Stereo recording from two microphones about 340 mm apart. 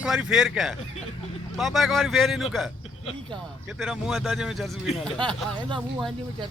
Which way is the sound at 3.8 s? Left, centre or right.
Centre.